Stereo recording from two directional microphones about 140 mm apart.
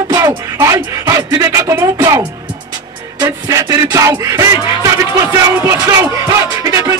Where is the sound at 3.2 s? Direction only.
25° right (ahead or behind).